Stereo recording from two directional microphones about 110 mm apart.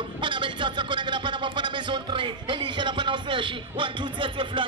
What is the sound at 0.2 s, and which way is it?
Speech, 45° right (ahead or behind).